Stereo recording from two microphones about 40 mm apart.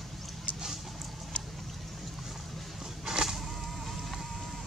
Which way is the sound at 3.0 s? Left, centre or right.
Centre.